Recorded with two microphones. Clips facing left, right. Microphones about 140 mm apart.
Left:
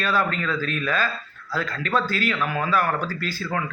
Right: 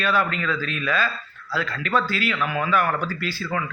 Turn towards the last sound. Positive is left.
turn(degrees=45)  # may be behind; listen again after turning